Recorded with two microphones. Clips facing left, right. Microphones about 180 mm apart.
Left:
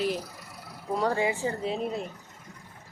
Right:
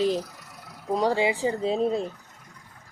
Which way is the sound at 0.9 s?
15° right (ahead or behind).